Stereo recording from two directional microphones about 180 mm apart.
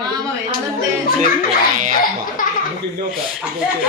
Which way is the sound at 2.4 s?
50° left (ahead or behind).